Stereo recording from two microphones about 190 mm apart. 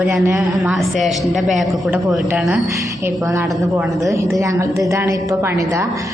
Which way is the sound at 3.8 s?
Centre (ahead or behind).